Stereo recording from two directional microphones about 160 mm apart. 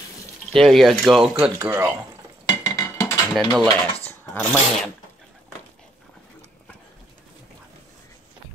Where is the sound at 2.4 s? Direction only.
20° left (ahead or behind).